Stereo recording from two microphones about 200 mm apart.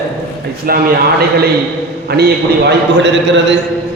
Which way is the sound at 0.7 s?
45° right (ahead or behind).